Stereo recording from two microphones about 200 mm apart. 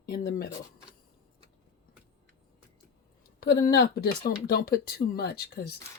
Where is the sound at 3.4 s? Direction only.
50° left (ahead or behind).